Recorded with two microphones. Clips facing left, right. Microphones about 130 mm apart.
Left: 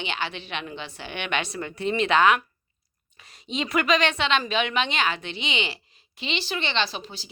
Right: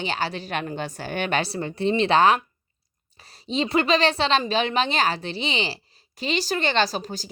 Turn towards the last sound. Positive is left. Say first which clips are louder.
# right 5 dB
turn(degrees=-40)  # may be behind; listen again after turning